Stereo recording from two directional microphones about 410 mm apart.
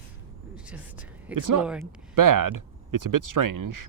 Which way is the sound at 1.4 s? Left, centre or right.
Right.